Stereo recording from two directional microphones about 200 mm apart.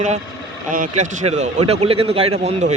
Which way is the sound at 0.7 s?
40° right (ahead or behind).